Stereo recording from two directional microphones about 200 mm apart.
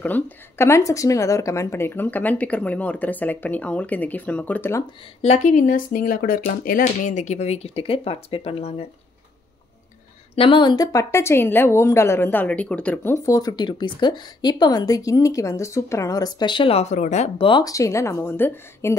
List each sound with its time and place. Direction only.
0.0 s a woman's voice: 10° left (ahead or behind)
5.2 s speech: 35° left (ahead or behind)
10.3 s a woman's voice: 25° left (ahead or behind)
17.5 s a woman's voice: 20° left (ahead or behind)